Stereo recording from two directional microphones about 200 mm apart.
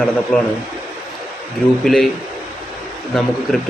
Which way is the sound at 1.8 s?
Centre (ahead or behind).